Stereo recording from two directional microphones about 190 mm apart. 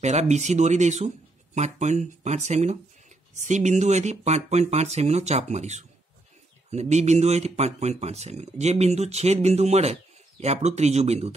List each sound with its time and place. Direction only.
0.0 s speech: 35° right (ahead or behind)